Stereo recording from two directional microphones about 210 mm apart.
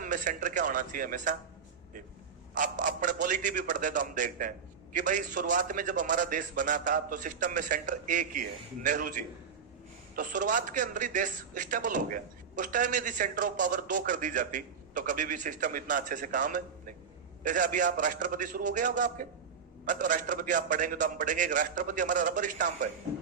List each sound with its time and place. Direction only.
0.0 s a man's voice: 40° right (ahead or behind)
2.6 s a man's voice: 40° right (ahead or behind)